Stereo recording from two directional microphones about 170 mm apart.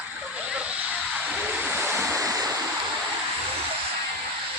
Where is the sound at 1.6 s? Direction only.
10° right (ahead or behind).